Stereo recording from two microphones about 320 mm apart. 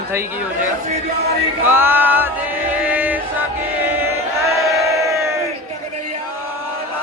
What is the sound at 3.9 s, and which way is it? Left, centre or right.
Crowd, centre.